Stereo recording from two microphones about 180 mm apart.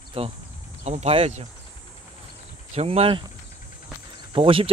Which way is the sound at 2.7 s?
35° right (ahead or behind).